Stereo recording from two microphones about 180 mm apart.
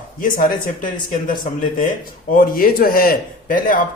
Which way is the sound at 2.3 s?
55° left (ahead or behind).